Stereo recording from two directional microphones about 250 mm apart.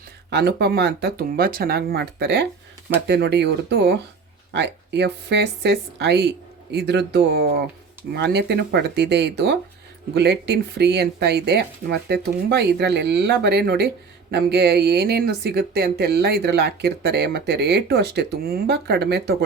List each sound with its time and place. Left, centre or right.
0.3 s speech: right